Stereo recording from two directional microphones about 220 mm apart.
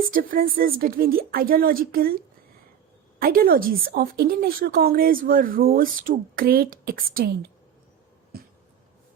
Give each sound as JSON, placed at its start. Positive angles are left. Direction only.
{"t": 0.1, "sound": "a woman's voice", "side_deg": -40}